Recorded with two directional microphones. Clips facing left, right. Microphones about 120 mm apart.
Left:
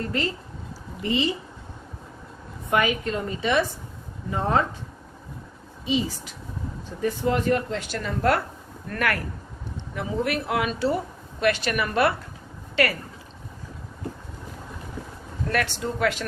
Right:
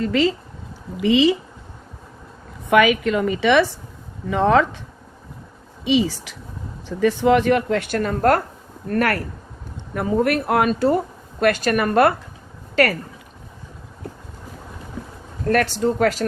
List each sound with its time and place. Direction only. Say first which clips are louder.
0.0 s a woman's voice: right 9 dB; 90° right
2.6 s a woman's voice: right 8 dB; 90° right
5.8 s a woman's voice: right 7 dB; 90° right; by 9.2 s 40° right (ahead or behind)
9.9 s a woman's voice: right 7 dB; 50° right (ahead or behind)
15.4 s speech: right 8 dB; 40° right (ahead or behind)